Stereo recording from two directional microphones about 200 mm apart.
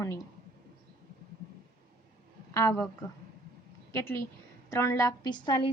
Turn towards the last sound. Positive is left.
turn(degrees=25)  # may be behind; listen again after turning